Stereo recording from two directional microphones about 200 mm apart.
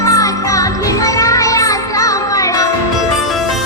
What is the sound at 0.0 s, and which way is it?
Music, 15° left (ahead or behind).